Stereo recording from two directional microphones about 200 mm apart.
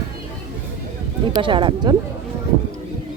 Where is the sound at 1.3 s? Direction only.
25° right (ahead or behind).